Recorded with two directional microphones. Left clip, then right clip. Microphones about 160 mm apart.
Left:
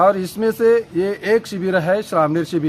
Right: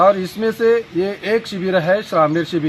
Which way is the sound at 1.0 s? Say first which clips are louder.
Even; 40° left (ahead or behind).